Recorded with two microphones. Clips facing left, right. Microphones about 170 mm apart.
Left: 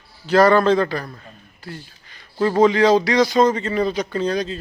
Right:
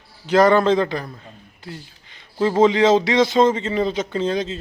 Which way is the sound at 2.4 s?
20° right (ahead or behind).